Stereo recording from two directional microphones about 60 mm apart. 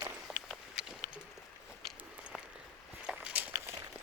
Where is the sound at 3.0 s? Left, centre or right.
Right.